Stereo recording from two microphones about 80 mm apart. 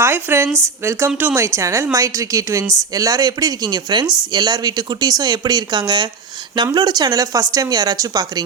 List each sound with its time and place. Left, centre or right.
0.0 s speech: right